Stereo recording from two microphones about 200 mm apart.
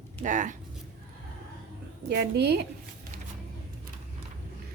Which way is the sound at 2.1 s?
55° right (ahead or behind).